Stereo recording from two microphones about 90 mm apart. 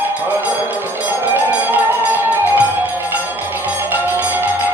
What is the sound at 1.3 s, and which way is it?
Music, 20° right (ahead or behind).